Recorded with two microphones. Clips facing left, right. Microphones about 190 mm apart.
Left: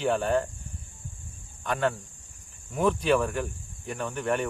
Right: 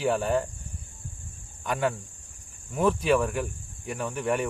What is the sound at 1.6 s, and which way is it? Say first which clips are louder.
Speech: even; 10° right (ahead or behind).